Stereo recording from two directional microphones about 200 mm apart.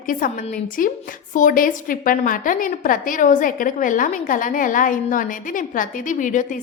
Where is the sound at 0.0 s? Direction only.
45° left (ahead or behind).